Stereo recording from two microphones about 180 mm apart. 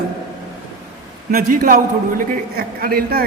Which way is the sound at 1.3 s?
50° right (ahead or behind).